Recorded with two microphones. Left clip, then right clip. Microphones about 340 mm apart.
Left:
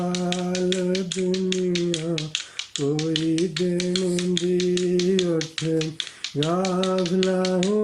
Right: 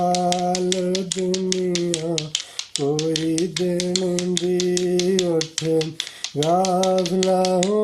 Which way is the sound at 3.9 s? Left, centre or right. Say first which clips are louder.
Right 2 dB; centre.